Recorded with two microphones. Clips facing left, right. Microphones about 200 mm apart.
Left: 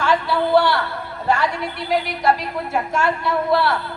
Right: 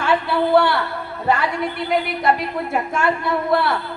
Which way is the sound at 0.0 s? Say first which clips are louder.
Right 1 dB; 60° right (ahead or behind).